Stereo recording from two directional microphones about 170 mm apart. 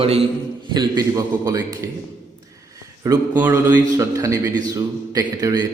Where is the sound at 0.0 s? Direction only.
35° right (ahead or behind).